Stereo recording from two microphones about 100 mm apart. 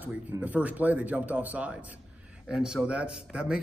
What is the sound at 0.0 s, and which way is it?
A man's voice, 15° right (ahead or behind).